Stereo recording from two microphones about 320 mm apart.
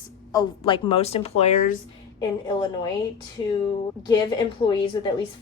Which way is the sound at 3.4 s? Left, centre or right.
Centre.